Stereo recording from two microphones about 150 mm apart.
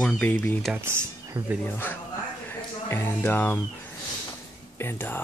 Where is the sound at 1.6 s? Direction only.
10° left (ahead or behind).